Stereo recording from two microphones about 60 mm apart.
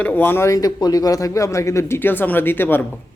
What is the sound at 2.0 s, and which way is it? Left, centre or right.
Speech, left.